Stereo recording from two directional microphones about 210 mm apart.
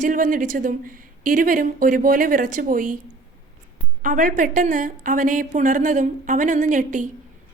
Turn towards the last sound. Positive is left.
turn(degrees=-35)  # may be behind; listen again after turning